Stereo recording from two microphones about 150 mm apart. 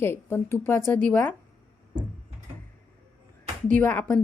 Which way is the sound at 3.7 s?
10° left (ahead or behind).